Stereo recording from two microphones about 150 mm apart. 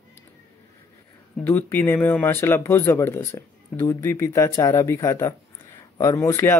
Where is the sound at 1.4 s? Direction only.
15° left (ahead or behind).